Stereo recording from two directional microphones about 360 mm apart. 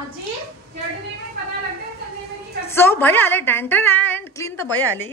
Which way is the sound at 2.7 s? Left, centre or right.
Centre.